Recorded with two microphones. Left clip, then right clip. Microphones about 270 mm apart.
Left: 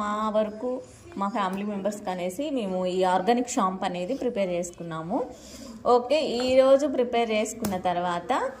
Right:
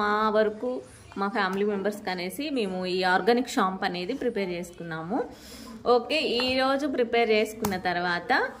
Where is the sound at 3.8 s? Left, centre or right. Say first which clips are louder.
Left 1 dB; right.